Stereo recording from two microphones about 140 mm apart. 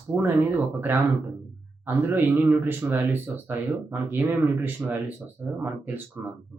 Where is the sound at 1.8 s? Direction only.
15° right (ahead or behind).